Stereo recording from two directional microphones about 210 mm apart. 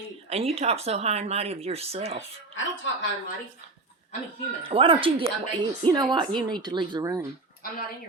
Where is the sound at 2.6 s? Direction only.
65° left (ahead or behind).